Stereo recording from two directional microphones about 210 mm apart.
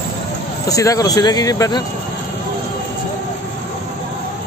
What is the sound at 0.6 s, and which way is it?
Speech, 15° left (ahead or behind).